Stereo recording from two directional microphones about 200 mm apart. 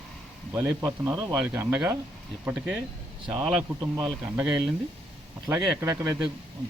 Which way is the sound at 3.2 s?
25° right (ahead or behind).